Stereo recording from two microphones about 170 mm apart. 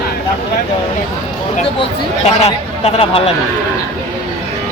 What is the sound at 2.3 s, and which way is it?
Speech, 40° left (ahead or behind).